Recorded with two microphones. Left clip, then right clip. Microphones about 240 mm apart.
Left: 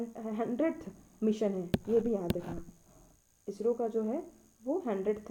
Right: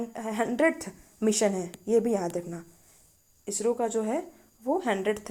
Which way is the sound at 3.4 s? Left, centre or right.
Centre.